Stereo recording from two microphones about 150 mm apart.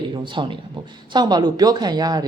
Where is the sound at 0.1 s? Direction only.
35° right (ahead or behind).